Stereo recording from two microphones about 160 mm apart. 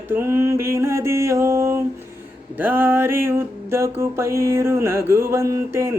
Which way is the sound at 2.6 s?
10° right (ahead or behind).